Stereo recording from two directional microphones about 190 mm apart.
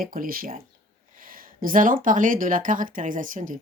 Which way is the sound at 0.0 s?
50° right (ahead or behind).